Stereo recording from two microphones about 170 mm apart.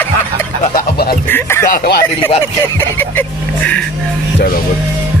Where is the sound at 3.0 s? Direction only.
10° left (ahead or behind).